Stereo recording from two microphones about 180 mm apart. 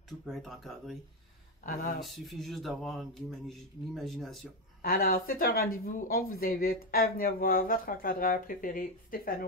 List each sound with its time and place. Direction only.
0.3 s speech: centre (ahead or behind)
2.0 s speech: centre (ahead or behind)
4.8 s speech: 55° left (ahead or behind)